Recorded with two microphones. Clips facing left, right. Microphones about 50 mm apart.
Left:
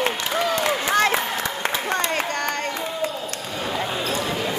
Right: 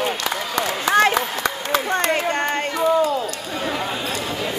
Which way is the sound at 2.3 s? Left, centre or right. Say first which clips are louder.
Right 4 dB; right.